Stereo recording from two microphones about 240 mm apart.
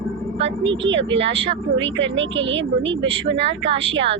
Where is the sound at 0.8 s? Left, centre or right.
Right.